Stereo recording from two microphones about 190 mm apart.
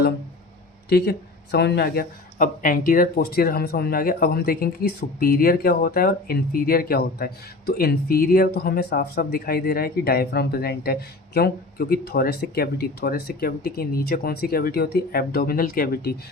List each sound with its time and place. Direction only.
0.9 s speech: 60° left (ahead or behind)